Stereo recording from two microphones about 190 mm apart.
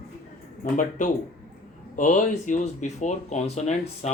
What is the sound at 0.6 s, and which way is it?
Speech, 40° left (ahead or behind).